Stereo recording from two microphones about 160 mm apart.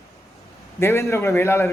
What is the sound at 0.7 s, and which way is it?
Speech, 15° left (ahead or behind).